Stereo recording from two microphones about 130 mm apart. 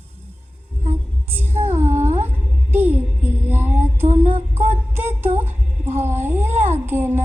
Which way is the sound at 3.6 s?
60° right (ahead or behind).